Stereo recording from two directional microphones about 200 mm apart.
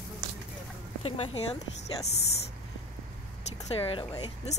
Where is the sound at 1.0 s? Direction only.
30° left (ahead or behind).